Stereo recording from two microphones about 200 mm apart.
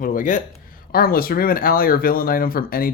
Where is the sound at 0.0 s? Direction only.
40° left (ahead or behind).